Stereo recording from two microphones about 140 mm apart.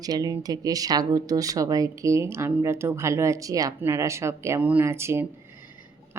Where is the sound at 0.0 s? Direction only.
30° right (ahead or behind).